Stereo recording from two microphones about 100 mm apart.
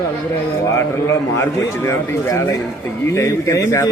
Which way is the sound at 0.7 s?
30° left (ahead or behind).